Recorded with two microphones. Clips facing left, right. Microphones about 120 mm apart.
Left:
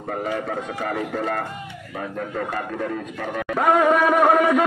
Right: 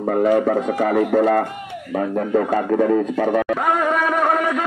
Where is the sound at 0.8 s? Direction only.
80° right.